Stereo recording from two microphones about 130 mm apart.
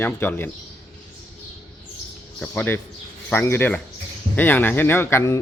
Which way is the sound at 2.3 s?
15° left (ahead or behind).